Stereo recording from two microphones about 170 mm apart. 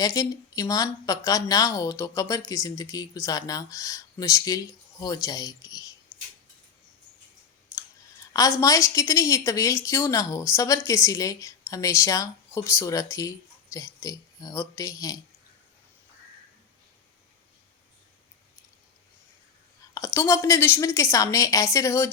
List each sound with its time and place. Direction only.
0.0 s speech: 20° left (ahead or behind)
8.3 s speech: 20° left (ahead or behind)
19.8 s a sound: 20° left (ahead or behind)
20.1 s speech: 15° left (ahead or behind)